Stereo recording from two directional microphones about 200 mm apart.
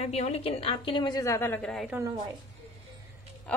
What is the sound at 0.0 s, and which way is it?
A woman's voice, 30° left (ahead or behind).